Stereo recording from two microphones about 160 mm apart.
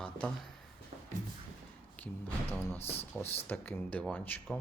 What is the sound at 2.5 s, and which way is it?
Speech, 15° left (ahead or behind).